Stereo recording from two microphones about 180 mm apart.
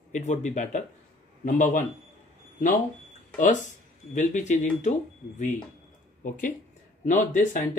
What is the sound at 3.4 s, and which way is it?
Speech, 45° left (ahead or behind).